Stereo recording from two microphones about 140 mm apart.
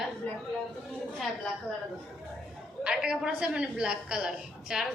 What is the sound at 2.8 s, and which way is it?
A woman's voice, 5° right (ahead or behind).